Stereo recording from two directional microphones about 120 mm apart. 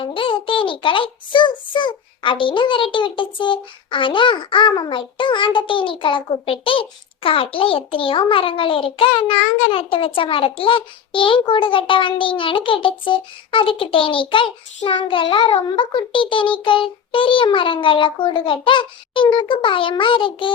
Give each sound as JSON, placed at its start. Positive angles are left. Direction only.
{"t": 0.0, "sound": "a child's voice", "side_deg": 45}